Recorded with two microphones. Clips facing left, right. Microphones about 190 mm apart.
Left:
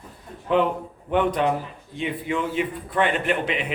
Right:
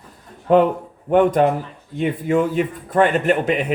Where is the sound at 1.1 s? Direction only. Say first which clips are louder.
Right 6 dB; 45° right (ahead or behind).